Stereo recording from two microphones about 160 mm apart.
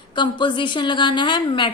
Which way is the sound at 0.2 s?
30° left (ahead or behind).